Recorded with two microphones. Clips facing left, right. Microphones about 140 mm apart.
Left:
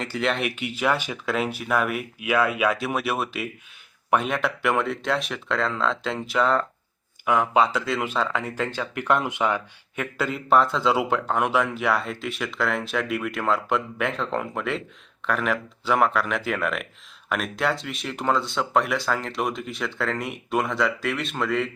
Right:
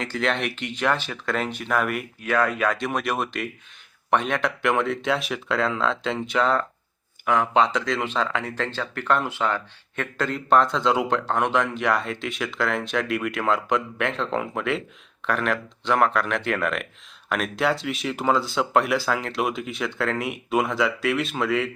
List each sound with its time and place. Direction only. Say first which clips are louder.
0.0 s speech: even; centre (ahead or behind)